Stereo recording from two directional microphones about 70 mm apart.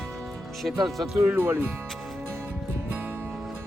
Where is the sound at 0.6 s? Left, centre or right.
Centre.